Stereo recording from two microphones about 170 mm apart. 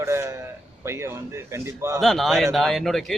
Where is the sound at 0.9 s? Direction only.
15° right (ahead or behind).